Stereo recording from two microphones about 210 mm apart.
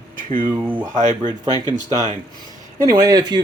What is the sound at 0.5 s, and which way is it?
Speech, 10° right (ahead or behind).